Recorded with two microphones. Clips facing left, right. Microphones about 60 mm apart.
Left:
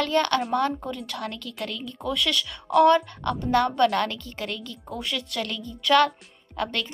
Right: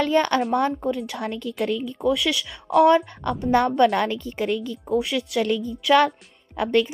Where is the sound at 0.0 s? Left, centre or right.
Centre.